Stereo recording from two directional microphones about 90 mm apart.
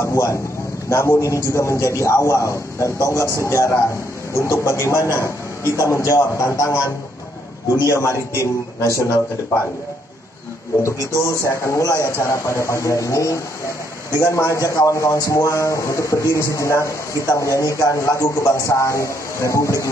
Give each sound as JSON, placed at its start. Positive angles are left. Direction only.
{"t": 0.0, "sound": "a man's voice", "side_deg": 35}
{"t": 11.2, "sound": "a man's voice", "side_deg": 30}